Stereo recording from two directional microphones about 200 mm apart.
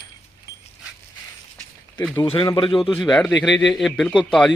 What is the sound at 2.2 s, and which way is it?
Speech, 25° left (ahead or behind).